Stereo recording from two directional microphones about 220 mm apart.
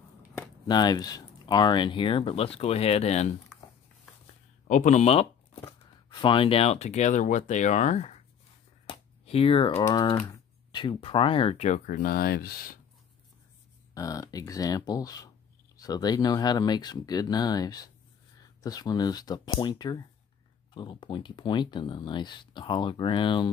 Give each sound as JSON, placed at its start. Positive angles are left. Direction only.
{"t": 0.7, "sound": "speech", "side_deg": 20}
{"t": 4.6, "sound": "speech", "side_deg": 35}
{"t": 8.8, "sound": "a sound", "side_deg": 25}
{"t": 9.8, "sound": "speech", "side_deg": 20}
{"t": 13.9, "sound": "speech", "side_deg": 15}